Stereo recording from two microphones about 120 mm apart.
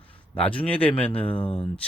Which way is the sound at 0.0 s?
10° left (ahead or behind).